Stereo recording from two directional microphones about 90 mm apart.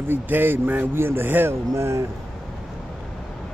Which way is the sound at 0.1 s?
20° right (ahead or behind).